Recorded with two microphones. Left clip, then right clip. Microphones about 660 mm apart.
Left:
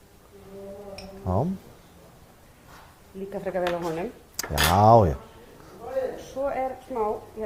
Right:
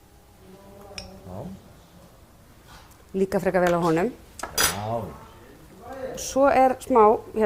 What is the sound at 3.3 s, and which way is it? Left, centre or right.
Speech, right.